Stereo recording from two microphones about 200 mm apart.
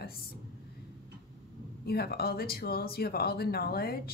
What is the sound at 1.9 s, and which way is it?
A woman's voice, 50° left (ahead or behind).